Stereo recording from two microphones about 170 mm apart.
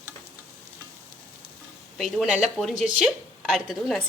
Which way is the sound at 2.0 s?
Centre (ahead or behind).